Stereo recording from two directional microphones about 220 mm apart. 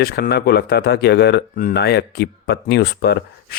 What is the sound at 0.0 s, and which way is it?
Speech, 45° left (ahead or behind).